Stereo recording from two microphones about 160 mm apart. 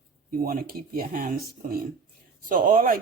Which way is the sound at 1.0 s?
60° right (ahead or behind).